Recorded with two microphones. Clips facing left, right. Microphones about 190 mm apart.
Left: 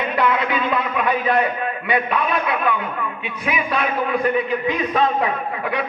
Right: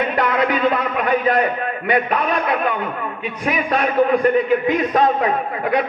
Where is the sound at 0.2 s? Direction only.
45° right (ahead or behind).